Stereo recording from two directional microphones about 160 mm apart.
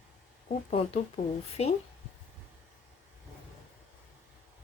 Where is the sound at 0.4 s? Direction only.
40° left (ahead or behind).